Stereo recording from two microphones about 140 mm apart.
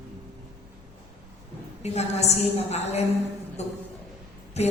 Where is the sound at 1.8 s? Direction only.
50° left (ahead or behind).